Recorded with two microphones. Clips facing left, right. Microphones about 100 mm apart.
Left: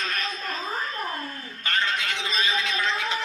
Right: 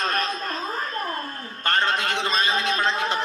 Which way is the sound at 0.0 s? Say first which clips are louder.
Right 5 dB; 45° right (ahead or behind).